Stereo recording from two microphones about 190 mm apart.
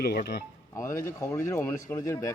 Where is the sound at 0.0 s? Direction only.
55° left (ahead or behind).